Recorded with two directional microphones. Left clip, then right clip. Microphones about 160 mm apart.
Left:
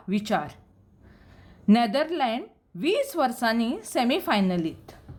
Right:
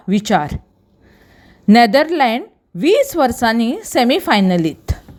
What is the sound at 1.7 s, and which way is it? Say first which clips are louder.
A woman's voice: right 12 dB; 40° right (ahead or behind).